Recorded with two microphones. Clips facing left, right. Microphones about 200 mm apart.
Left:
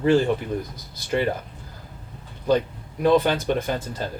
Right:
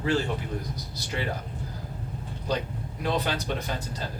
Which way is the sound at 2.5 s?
50° left (ahead or behind).